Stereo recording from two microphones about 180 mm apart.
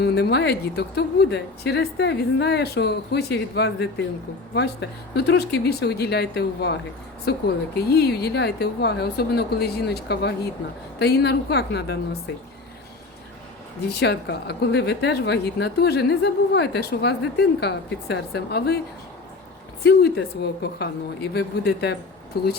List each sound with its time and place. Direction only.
0.0 s a woman's voice: 70° left (ahead or behind)
14.0 s a woman's voice: 65° left (ahead or behind)
19.8 s a woman's voice: 65° left (ahead or behind)